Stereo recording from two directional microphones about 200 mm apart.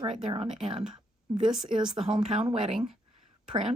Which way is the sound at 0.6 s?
30° right (ahead or behind).